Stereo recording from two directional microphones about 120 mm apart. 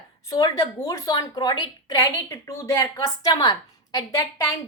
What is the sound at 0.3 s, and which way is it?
A woman's voice, 30° left (ahead or behind).